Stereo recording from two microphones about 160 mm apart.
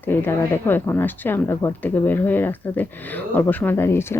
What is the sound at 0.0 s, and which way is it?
Speech, 15° left (ahead or behind).